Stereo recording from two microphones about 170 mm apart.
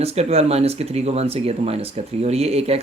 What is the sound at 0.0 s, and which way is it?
Speech, 40° right (ahead or behind).